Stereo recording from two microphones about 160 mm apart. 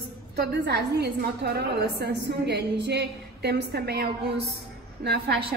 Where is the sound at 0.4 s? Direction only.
90° right.